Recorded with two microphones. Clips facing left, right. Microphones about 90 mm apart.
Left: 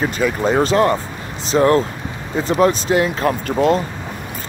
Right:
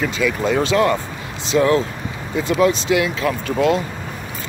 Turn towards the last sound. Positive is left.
turn(degrees=40)  # may be behind; listen again after turning